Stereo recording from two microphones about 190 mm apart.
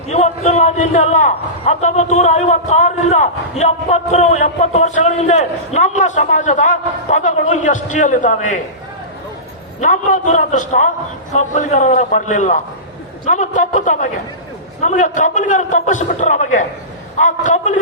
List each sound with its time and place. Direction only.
0.1 s a man's voice: 35° left (ahead or behind)
9.8 s a man's voice: 40° left (ahead or behind)